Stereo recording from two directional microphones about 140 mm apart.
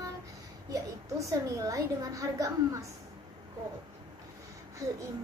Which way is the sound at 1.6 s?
25° right (ahead or behind).